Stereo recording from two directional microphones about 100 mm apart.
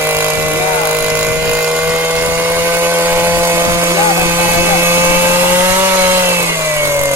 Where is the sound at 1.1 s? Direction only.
15° right (ahead or behind).